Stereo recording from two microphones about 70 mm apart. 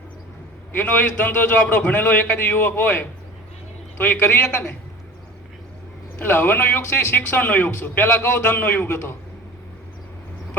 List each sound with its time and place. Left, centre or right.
0.7 s a man's voice: left
6.1 s a man's voice: left